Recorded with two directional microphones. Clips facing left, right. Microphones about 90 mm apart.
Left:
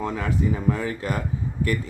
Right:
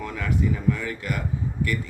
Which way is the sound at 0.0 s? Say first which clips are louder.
Left 2 dB; 30° left (ahead or behind).